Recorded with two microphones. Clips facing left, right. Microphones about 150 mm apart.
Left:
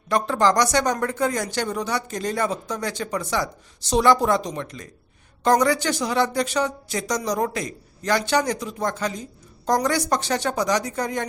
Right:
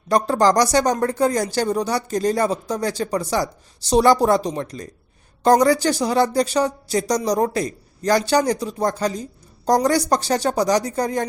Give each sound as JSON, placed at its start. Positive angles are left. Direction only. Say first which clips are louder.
{"t": 0.1, "sound": "speech", "louder": "right 3 dB", "side_deg": -40}